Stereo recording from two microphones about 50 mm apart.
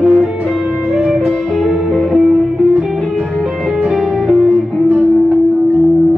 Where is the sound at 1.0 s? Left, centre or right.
Centre.